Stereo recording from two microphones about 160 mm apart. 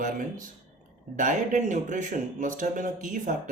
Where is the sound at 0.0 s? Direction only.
55° right (ahead or behind).